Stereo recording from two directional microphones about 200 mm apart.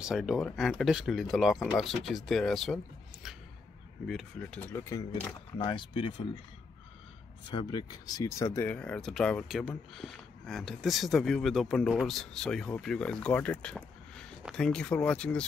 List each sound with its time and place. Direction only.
0.0 s speech: centre (ahead or behind); by 6.2 s 25° left (ahead or behind)
7.5 s speech: 20° left (ahead or behind)